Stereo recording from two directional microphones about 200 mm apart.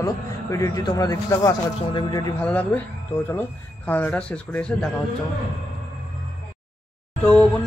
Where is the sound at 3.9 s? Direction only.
10° left (ahead or behind).